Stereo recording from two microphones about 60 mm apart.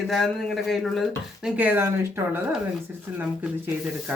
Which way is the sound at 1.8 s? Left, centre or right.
Right.